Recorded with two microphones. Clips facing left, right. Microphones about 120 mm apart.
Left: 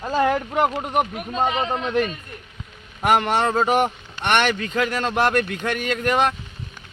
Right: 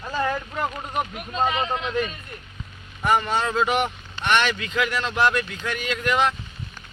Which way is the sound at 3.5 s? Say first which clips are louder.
Left 3 dB; 45° left (ahead or behind).